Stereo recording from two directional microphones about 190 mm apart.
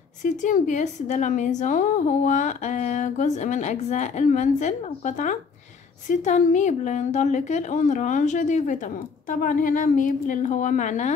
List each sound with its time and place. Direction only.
0.2 s a woman's voice: 40° left (ahead or behind)